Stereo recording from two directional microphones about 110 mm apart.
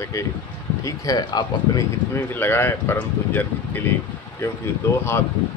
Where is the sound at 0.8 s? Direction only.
35° left (ahead or behind).